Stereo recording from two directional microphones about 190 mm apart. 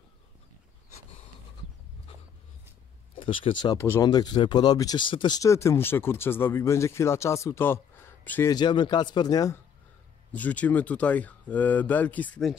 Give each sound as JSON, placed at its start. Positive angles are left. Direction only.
{"t": 3.2, "sound": "speech", "side_deg": 25}
{"t": 8.5, "sound": "speech", "side_deg": 25}
{"t": 10.3, "sound": "speech", "side_deg": 10}